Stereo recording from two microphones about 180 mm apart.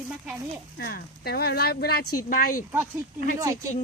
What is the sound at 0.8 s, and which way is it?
Speech, 60° left (ahead or behind).